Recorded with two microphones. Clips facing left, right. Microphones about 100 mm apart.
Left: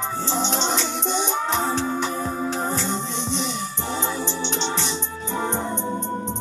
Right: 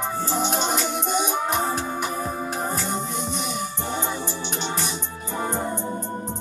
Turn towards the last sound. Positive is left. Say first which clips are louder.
# left 3 dB
turn(degrees=25)  # may be behind; listen again after turning